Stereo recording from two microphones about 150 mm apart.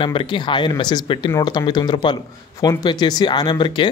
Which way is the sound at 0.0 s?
35° left (ahead or behind).